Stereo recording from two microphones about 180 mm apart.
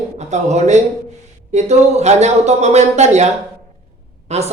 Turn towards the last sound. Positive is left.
turn(degrees=-35)  # may be behind; listen again after turning